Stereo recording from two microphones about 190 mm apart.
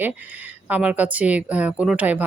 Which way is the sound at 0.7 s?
5° right (ahead or behind).